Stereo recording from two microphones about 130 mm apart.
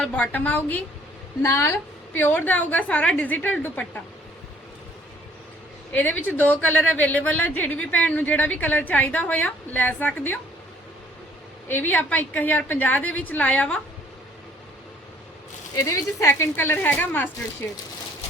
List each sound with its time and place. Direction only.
0.0 s a woman's voice: 10° left (ahead or behind)
5.9 s a woman's voice: 10° left (ahead or behind)
11.7 s a woman's voice: 15° left (ahead or behind)
15.7 s a woman's voice: 25° left (ahead or behind)